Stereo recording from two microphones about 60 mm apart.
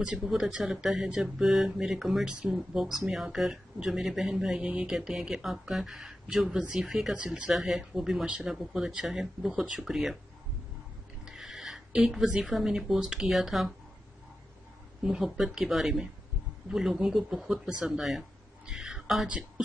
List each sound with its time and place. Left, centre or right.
0.2 s speech: centre
1.4 s speech: centre
11.2 s a sound: centre
12.3 s speech: centre
15.0 s speech: centre
18.7 s a sound: centre
19.2 s speech: centre